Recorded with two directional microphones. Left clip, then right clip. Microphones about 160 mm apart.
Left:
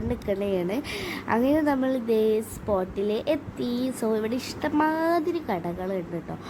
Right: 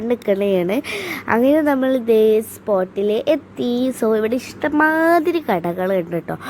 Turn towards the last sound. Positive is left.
turn(degrees=-55)  # may be behind; listen again after turning